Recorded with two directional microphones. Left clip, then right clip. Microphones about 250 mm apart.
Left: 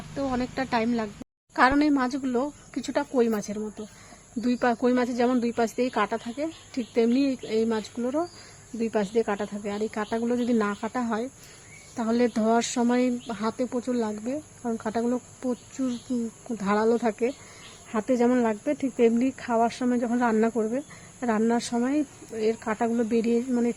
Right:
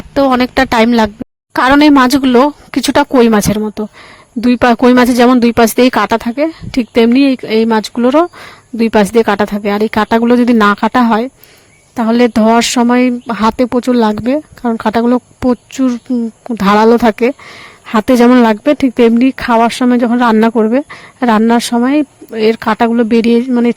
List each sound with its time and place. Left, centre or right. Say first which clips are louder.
0.2 s speech: right 19 dB; right